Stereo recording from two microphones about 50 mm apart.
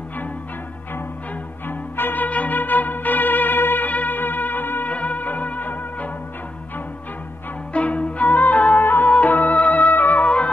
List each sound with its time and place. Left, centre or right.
1.7 s music: left
2.2 s music: left
4.9 s music: left
7.7 s music: left
8.8 s music: left
9.1 s music: left